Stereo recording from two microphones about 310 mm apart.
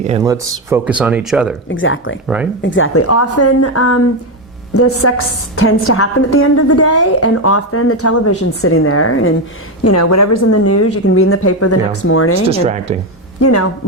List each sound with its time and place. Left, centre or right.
0.1 s speech: centre
1.7 s speech: left
2.2 s speech: centre
2.6 s a woman's voice: left
9.8 s a woman's voice: left
12.5 s speech: right
13.4 s a woman's voice: left